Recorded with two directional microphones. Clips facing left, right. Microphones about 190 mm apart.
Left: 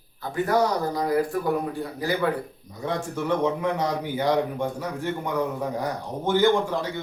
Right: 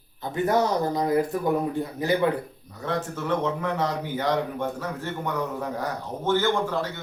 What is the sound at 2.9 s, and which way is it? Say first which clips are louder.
A man's voice: left 1 dB; 15° left (ahead or behind).